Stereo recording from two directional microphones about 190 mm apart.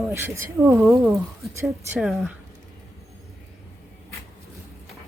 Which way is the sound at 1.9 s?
Centre (ahead or behind).